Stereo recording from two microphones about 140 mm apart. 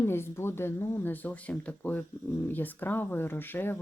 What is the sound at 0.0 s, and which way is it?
Speech, 15° left (ahead or behind).